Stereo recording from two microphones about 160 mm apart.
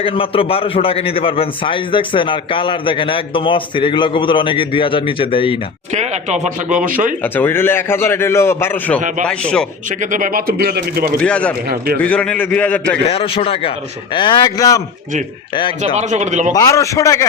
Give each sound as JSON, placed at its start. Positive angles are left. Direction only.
{"t": 0.0, "sound": "a man's voice", "side_deg": 35}
{"t": 5.9, "sound": "speech", "side_deg": -45}
{"t": 7.2, "sound": "a man's voice", "side_deg": 10}
{"t": 9.0, "sound": "speech", "side_deg": -50}
{"t": 9.2, "sound": "a man's voice", "side_deg": 5}
{"t": 10.0, "sound": "speech", "side_deg": -55}
{"t": 11.2, "sound": "a man's voice", "side_deg": 5}
{"t": 13.1, "sound": "a man's voice", "side_deg": 35}
{"t": 16.0, "sound": "speech", "side_deg": -50}
{"t": 16.5, "sound": "a man's voice", "side_deg": 20}